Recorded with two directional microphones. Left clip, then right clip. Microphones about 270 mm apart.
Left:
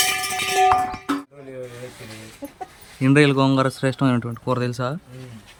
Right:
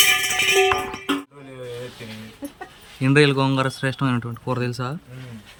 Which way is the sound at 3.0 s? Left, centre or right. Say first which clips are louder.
Left 1 dB; centre.